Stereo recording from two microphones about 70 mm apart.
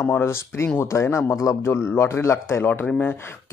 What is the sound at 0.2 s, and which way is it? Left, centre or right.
Speech, left.